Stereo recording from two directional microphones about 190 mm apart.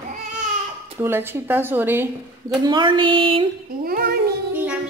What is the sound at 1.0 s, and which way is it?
Speech, 10° right (ahead or behind).